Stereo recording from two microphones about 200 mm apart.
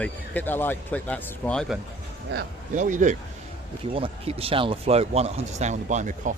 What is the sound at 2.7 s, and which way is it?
Speech, 40° right (ahead or behind).